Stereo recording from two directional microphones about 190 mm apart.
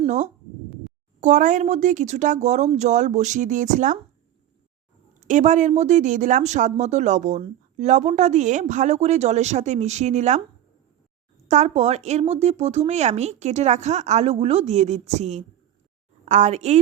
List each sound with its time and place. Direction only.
0.0 s speech: 40° right (ahead or behind)
5.3 s speech: 40° right (ahead or behind)
11.4 s speech: 35° right (ahead or behind)